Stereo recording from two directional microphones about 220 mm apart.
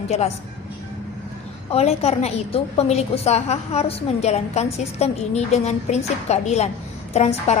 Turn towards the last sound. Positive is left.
turn(degrees=30)  # may be behind; listen again after turning